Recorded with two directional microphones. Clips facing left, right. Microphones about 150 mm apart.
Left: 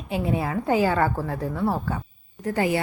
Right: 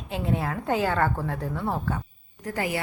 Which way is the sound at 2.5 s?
30° left (ahead or behind).